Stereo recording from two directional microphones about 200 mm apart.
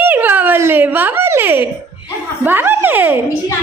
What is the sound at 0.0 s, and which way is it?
Giggle, 10° right (ahead or behind).